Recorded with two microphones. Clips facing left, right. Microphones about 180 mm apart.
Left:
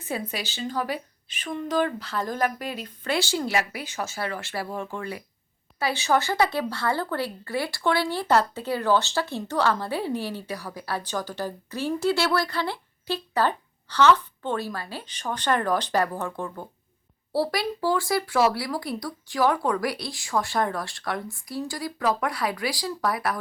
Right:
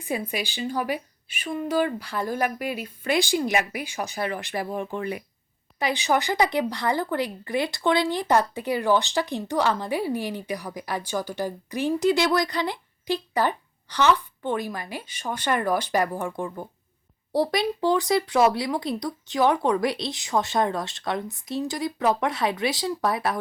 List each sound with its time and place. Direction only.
0.0 s speech: 15° right (ahead or behind)